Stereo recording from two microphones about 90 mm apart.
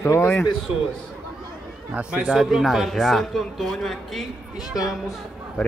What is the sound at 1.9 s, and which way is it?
Speech, 10° right (ahead or behind).